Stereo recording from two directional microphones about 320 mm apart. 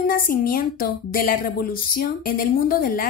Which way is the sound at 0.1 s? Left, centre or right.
Left.